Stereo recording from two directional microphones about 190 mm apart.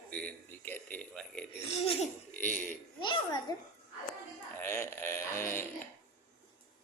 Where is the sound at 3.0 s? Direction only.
25° left (ahead or behind).